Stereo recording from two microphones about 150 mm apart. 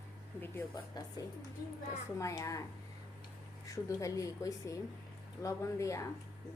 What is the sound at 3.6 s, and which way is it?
A woman's voice, 20° left (ahead or behind).